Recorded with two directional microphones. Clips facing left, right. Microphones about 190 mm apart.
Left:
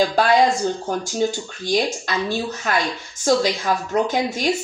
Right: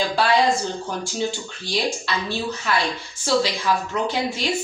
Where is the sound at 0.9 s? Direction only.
45° left (ahead or behind).